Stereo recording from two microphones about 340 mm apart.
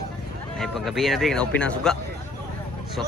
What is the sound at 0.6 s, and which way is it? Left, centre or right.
Speech, centre.